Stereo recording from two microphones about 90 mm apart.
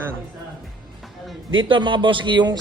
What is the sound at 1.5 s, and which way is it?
Speech, 65° right (ahead or behind).